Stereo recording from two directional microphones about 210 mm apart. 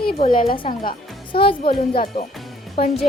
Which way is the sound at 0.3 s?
45° left (ahead or behind).